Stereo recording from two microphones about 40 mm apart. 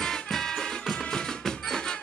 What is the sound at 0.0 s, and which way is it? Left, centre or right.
Music, centre.